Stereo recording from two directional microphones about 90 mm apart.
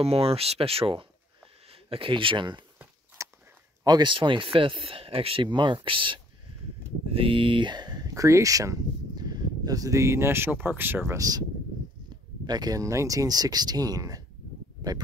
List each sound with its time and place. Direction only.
0.0 s speech: 90° right; by 2.6 s 60° right (ahead or behind)
3.2 s a sound: 35° right (ahead or behind)
3.8 s speech: 45° right (ahead or behind)
4.1 s speech: 65° right (ahead or behind)
7.2 s speech: 75° right (ahead or behind); by 11.1 s 25° right (ahead or behind)
11.1 s speech: 40° right (ahead or behind)
12.4 s speech: 50° right (ahead or behind)